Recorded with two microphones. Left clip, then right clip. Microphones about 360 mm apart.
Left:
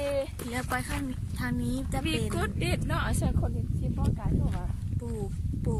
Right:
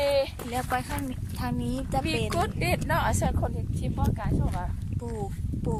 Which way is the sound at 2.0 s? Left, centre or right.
Centre.